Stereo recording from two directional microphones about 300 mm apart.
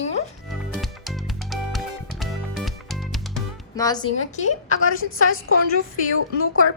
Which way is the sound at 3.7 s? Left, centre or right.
Centre.